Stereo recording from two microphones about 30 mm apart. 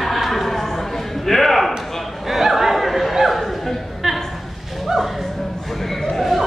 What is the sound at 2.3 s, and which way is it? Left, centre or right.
Chatter, centre.